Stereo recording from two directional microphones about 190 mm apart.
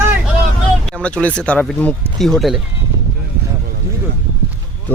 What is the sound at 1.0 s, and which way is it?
Speech, 5° left (ahead or behind).